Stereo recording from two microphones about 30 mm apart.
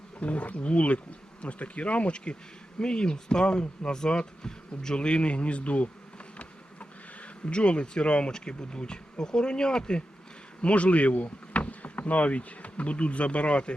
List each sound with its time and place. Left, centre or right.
0.2 s speech: left
7.4 s speech: left
10.6 s speech: left